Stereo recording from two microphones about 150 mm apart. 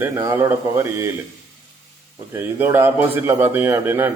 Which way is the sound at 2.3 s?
15° right (ahead or behind).